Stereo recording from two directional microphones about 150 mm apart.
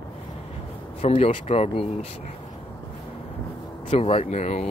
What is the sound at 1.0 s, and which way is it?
Speech, 40° left (ahead or behind).